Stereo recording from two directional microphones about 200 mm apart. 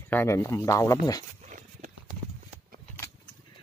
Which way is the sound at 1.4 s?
40° right (ahead or behind).